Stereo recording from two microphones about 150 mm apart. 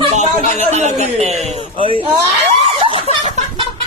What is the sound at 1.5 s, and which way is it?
Speech, 40° right (ahead or behind).